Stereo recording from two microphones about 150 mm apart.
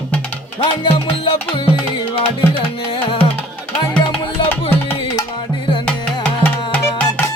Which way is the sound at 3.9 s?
10° left (ahead or behind).